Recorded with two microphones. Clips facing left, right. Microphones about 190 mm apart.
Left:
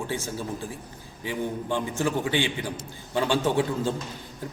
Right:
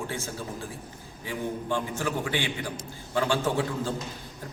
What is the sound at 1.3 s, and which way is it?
A man's voice, 20° left (ahead or behind).